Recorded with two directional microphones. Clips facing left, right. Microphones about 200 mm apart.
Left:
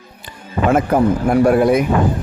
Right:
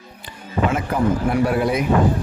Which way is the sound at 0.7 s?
50° left (ahead or behind).